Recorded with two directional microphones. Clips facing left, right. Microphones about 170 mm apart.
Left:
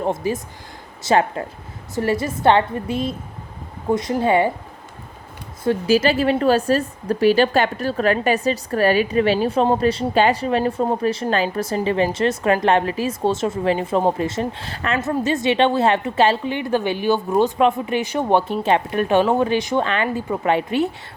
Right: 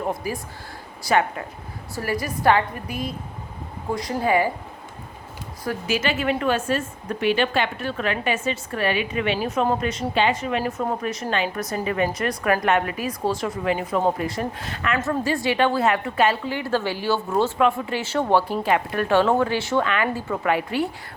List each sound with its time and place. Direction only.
0.0 s a woman's voice: 25° left (ahead or behind)
5.6 s a woman's voice: 35° left (ahead or behind)
15.0 s a woman's voice: 20° left (ahead or behind)
19.8 s a woman's voice: 30° left (ahead or behind)
20.1 s a woman's voice: 15° left (ahead or behind)
20.4 s a woman's voice: 25° left (ahead or behind)